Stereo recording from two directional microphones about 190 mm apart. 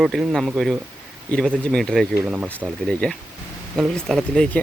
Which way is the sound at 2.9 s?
5° left (ahead or behind).